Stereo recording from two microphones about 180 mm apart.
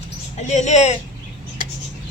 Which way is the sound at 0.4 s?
40° left (ahead or behind).